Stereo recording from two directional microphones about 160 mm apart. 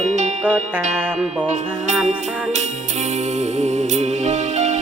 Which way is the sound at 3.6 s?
45° right (ahead or behind).